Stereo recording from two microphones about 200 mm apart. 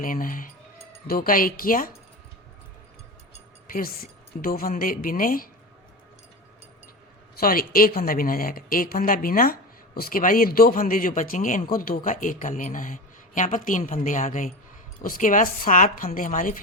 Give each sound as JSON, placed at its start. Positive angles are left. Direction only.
{"t": 0.0, "sound": "speech", "side_deg": 45}
{"t": 3.7, "sound": "speech", "side_deg": 45}
{"t": 7.3, "sound": "a woman's voice", "side_deg": 45}